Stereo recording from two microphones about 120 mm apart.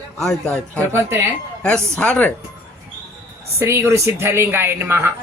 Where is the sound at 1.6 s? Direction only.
10° left (ahead or behind).